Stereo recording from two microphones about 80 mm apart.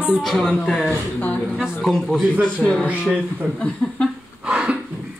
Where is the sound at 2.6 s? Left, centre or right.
Centre.